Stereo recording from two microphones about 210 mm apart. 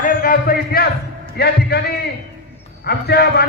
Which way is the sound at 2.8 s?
50° left (ahead or behind).